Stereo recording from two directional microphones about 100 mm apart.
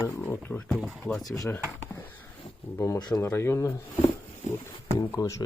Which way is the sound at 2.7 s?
30° left (ahead or behind).